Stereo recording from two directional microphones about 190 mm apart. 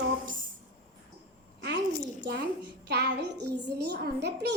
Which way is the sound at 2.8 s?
65° right (ahead or behind).